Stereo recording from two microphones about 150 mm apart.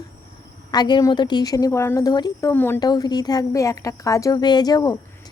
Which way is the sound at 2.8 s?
25° left (ahead or behind).